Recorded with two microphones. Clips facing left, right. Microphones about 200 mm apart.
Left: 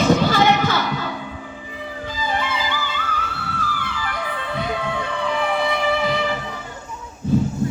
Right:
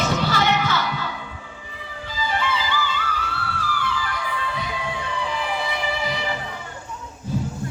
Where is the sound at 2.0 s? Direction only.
50° left (ahead or behind).